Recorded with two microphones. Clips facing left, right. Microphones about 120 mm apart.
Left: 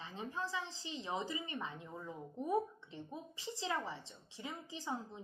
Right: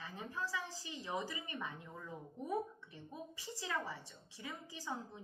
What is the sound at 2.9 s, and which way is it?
A woman's voice, 20° left (ahead or behind).